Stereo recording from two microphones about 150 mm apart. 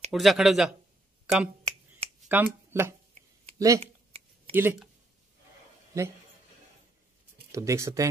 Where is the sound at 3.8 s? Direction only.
40° right (ahead or behind).